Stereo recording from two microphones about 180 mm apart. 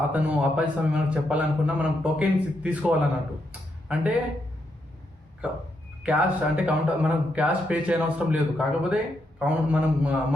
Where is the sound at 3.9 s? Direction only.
5° right (ahead or behind).